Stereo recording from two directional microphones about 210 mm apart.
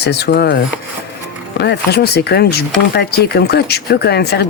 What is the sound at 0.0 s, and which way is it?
Speech, 50° left (ahead or behind).